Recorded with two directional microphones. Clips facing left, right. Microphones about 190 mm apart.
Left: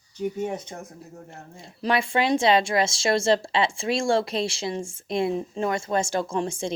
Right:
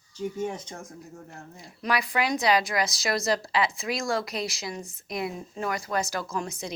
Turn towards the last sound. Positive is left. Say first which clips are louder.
# left 6 dB
turn(degrees=30)  # may be behind; listen again after turning